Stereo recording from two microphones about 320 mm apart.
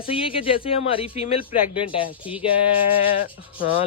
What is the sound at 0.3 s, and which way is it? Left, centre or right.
Speech, centre.